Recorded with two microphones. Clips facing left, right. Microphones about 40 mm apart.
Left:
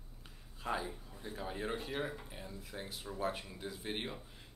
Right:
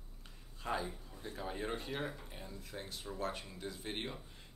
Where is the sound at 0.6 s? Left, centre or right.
Centre.